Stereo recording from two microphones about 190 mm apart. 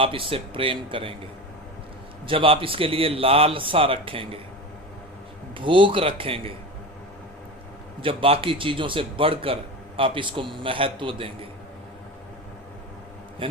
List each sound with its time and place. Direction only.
0.0 s a man's voice: 30° right (ahead or behind)
2.2 s a man's voice: 30° right (ahead or behind)
5.5 s a man's voice: 25° right (ahead or behind)
8.0 s a man's voice: 30° right (ahead or behind)
13.4 s a man's voice: 25° right (ahead or behind)